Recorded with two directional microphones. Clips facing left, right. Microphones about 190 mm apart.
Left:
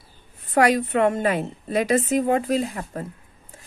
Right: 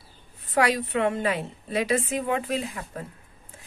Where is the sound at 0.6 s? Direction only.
50° left (ahead or behind).